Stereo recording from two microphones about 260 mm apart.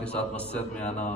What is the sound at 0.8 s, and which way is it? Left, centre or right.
Speech, left.